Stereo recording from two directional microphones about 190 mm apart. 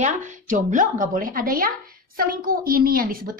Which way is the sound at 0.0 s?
40° right (ahead or behind).